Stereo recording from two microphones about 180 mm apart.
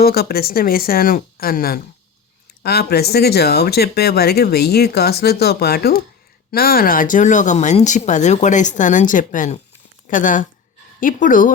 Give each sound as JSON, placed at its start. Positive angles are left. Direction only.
{"t": 0.0, "sound": "speech", "side_deg": 60}